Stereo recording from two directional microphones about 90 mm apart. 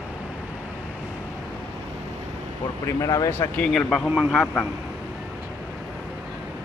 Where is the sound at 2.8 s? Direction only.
40° left (ahead or behind).